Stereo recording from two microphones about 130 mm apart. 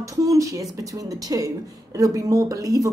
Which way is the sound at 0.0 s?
25° right (ahead or behind).